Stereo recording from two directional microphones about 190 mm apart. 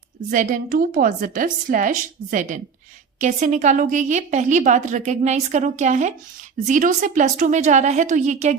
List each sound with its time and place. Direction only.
0.3 s a woman's voice: 45° right (ahead or behind)